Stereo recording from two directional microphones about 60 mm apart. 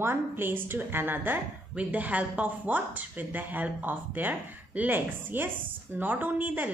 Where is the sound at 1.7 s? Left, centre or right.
Right.